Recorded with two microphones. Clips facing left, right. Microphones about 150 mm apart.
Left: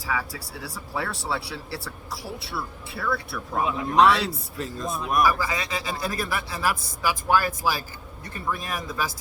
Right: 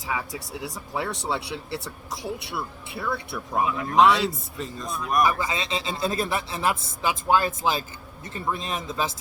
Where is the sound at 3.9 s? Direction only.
Centre (ahead or behind).